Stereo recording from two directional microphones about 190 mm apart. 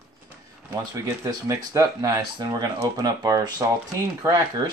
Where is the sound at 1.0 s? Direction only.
15° right (ahead or behind).